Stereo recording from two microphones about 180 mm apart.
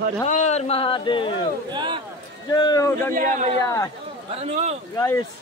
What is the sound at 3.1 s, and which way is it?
Speech, 50° right (ahead or behind).